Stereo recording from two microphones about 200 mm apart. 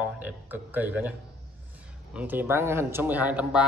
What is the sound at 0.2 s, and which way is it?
Speech, 10° right (ahead or behind).